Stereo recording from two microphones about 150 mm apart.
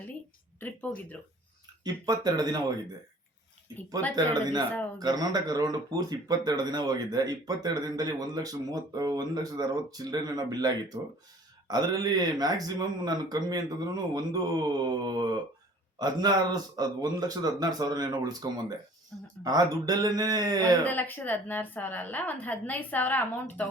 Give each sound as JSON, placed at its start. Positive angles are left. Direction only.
{"t": 0.6, "sound": "a woman's voice", "side_deg": 10}
{"t": 1.8, "sound": "speech", "side_deg": -25}
{"t": 4.1, "sound": "speech", "side_deg": -25}
{"t": 20.8, "sound": "a woman's voice", "side_deg": 10}